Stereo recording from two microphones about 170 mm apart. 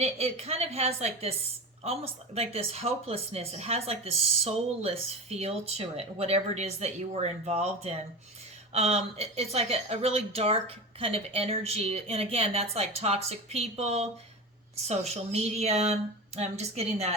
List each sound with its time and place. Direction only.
0.0 s speech: 40° right (ahead or behind)